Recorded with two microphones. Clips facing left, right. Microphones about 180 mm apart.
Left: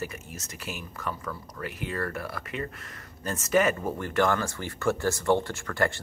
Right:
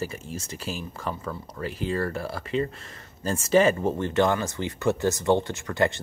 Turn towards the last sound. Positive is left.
turn(degrees=-20)  # may be behind; listen again after turning